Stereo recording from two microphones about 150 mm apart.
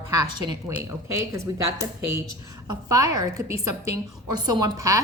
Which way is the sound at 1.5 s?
25° right (ahead or behind).